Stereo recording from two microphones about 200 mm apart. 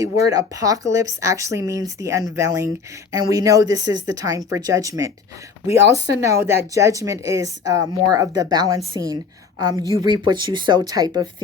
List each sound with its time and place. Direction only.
0.0 s a woman's voice: 15° right (ahead or behind)